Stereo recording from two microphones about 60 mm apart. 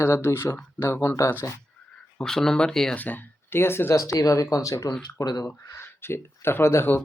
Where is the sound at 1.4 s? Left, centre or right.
Left.